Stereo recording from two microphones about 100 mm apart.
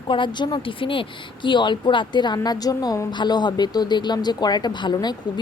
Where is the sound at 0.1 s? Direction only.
50° left (ahead or behind).